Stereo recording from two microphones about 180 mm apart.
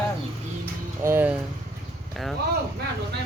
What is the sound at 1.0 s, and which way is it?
Vehicle, 10° right (ahead or behind).